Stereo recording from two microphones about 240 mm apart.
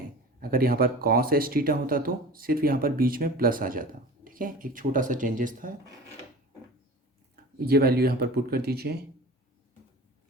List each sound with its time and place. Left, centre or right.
0.5 s speech: right
7.6 s speech: right